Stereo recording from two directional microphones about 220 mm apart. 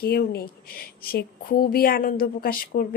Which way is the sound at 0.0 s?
45° left (ahead or behind).